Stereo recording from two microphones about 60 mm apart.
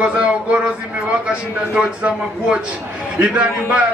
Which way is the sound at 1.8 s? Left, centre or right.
Centre.